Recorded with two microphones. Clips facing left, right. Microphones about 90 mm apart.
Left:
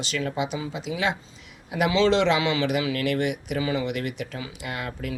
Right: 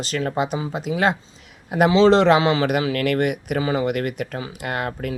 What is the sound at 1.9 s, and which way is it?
Speech, 35° right (ahead or behind).